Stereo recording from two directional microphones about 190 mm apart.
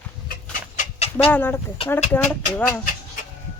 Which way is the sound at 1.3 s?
10° left (ahead or behind).